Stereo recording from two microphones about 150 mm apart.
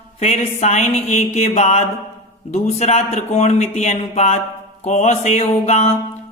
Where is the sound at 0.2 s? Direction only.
50° left (ahead or behind).